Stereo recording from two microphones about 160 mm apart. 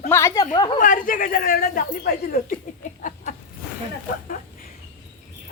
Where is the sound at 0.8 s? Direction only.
55° left (ahead or behind).